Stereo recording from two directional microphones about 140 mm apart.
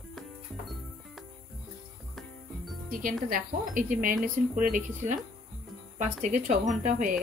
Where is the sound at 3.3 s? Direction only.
75° right (ahead or behind).